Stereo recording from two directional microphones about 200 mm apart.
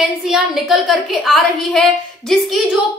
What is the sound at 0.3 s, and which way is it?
A woman's voice, centre (ahead or behind).